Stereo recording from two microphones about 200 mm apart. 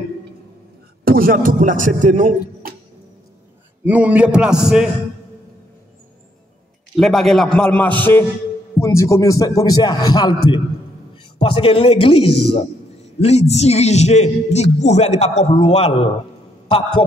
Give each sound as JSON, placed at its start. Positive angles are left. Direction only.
{"t": 1.0, "sound": "a man's voice", "side_deg": -45}
{"t": 3.8, "sound": "a man's voice", "side_deg": -5}
{"t": 7.0, "sound": "a man's voice", "side_deg": 0}